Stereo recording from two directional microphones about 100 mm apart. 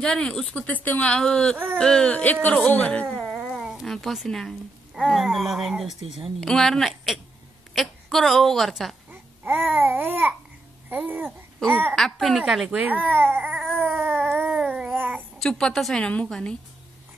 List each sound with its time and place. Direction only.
0.0 s a woman's voice: 5° left (ahead or behind)
3.5 s a woman's voice: 5° right (ahead or behind)
9.1 s babbling: 15° right (ahead or behind)
11.1 s speech: 15° right (ahead or behind)
11.9 s a woman's voice: centre (ahead or behind)
13.1 s baby cry: 20° right (ahead or behind)
13.7 s a sound: 20° right (ahead or behind)
14.4 s babbling: 15° right (ahead or behind)
15.3 s a woman's voice: 5° left (ahead or behind)